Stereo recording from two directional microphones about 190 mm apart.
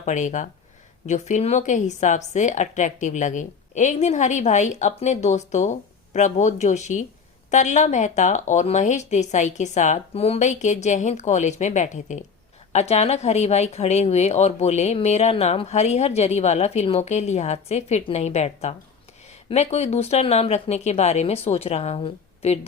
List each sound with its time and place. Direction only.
0.0 s a woman's voice: 40° left (ahead or behind)